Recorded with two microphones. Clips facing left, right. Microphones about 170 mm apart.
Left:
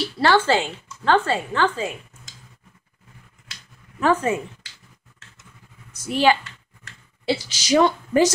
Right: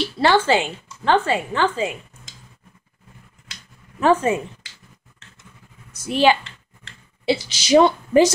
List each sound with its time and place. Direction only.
0.2 s a woman's voice: 15° right (ahead or behind)
4.0 s a woman's voice: 25° right (ahead or behind)
6.0 s a woman's voice: 20° right (ahead or behind)